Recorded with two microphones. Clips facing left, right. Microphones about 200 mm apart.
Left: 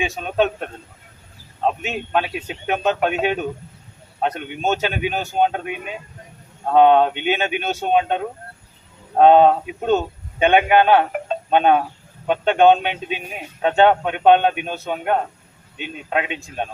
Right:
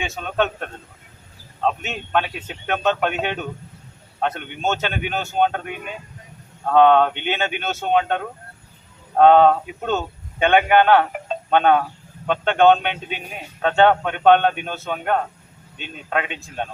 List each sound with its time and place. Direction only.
0.2 s a man's voice: 15° left (ahead or behind)
1.6 s a man's voice: 15° left (ahead or behind)